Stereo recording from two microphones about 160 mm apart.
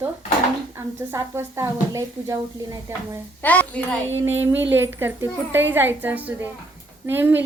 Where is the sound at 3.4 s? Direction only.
10° left (ahead or behind).